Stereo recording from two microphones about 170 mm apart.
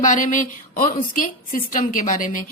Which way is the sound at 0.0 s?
50° left (ahead or behind).